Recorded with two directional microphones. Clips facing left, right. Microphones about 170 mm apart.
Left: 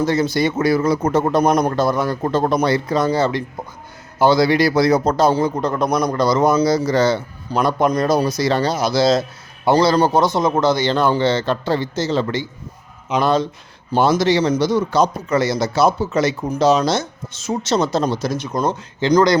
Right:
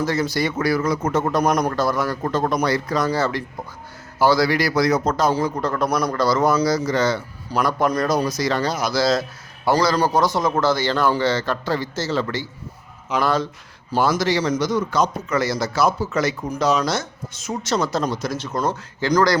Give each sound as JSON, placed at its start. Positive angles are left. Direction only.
{"t": 0.0, "sound": "a man's voice", "side_deg": 25}
{"t": 18.3, "sound": "a man's voice", "side_deg": 15}